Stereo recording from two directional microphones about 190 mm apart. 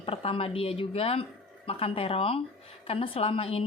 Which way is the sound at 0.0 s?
30° left (ahead or behind).